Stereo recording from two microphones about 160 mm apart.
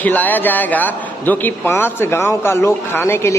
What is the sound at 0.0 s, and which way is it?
A man's voice, 10° left (ahead or behind).